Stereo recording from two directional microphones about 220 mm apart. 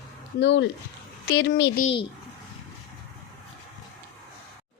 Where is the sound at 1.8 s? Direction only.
25° left (ahead or behind).